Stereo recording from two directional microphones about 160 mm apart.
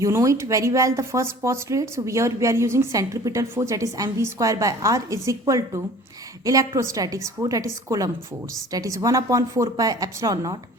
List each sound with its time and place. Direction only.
0.0 s speech: 20° right (ahead or behind)